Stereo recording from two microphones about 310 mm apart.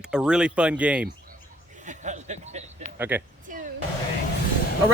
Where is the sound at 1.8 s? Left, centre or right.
Right.